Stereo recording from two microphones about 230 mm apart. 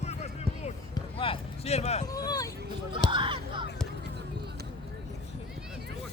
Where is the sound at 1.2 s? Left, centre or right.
Left.